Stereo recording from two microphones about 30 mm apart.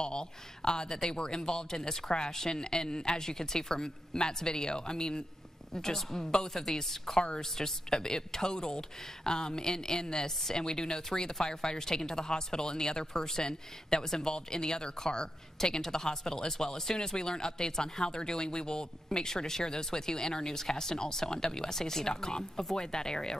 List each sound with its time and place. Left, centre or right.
0.0 s a woman's voice: left; by 7.2 s centre
7.2 s speech: left